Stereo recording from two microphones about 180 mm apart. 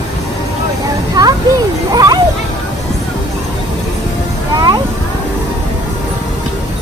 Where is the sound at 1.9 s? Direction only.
20° right (ahead or behind).